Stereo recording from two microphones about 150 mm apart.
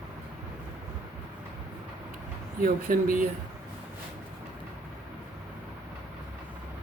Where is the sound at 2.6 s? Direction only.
70° right (ahead or behind).